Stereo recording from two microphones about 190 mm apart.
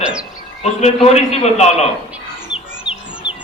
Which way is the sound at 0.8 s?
35° left (ahead or behind).